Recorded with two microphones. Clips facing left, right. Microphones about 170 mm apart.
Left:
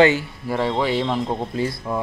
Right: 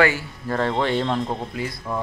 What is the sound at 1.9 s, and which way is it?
Speech, 15° left (ahead or behind).